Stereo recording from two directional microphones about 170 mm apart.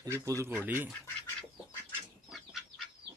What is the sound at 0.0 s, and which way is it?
Speech, 20° right (ahead or behind).